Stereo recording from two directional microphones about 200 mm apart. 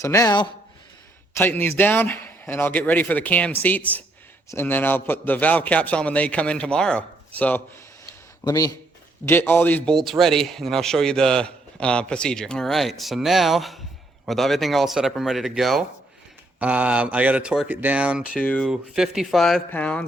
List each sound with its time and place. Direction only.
0.0 s a man's voice: 15° left (ahead or behind); by 18.3 s 5° right (ahead or behind)
18.3 s a man's voice: 5° left (ahead or behind)